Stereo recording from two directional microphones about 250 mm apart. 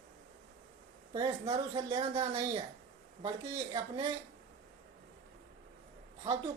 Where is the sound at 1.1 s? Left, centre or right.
Centre.